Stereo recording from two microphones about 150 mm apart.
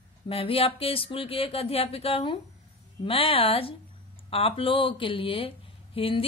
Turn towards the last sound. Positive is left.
turn(degrees=40)  # may be behind; listen again after turning